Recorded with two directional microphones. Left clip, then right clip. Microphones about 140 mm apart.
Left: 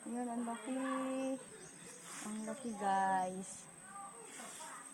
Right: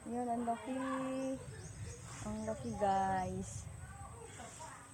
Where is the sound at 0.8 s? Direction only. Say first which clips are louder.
Even; 15° right (ahead or behind).